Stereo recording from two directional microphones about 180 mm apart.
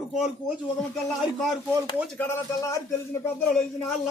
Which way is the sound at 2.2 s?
15° left (ahead or behind).